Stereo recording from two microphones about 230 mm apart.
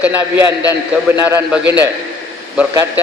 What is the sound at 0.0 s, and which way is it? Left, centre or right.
Speech, centre.